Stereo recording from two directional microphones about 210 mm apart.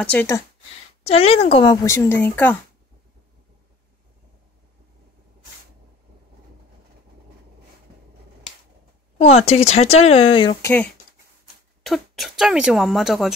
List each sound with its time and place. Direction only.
0.0 s speech: 10° left (ahead or behind)
1.0 s speech: 30° left (ahead or behind); by 2.5 s 10° left (ahead or behind)
9.2 s speech: 30° left (ahead or behind)
10.6 s speech: 10° left (ahead or behind)